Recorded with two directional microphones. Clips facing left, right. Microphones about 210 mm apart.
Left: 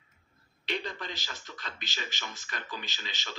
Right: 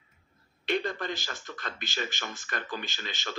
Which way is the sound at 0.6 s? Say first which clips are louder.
Right 6 dB; 50° right (ahead or behind).